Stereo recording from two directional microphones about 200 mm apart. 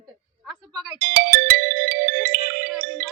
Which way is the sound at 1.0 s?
50° right (ahead or behind).